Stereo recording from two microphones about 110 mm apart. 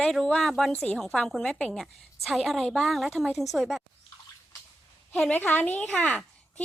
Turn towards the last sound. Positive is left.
turn(degrees=10)  # may be behind; listen again after turning